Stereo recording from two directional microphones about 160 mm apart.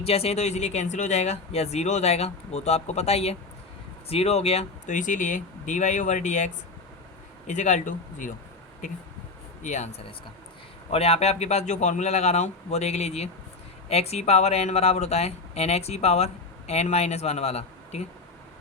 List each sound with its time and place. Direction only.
0.0 s speech: 40° left (ahead or behind)
9.6 s speech: 50° left (ahead or behind)
10.9 s speech: 40° left (ahead or behind)